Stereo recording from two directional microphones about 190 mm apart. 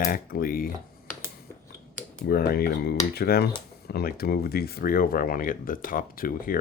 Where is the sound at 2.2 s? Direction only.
55° left (ahead or behind).